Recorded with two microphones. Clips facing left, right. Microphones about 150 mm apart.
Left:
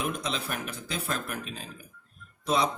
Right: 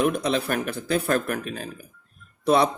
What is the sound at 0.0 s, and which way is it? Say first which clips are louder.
Speech: right 9 dB; 65° right (ahead or behind).